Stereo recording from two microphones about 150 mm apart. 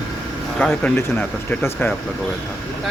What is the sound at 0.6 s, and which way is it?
Speech, 10° left (ahead or behind).